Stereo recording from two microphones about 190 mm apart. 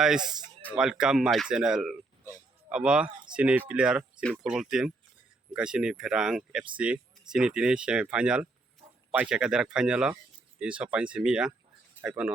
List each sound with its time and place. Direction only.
0.2 s speech: 20° right (ahead or behind)
0.8 s speech: 5° right (ahead or behind)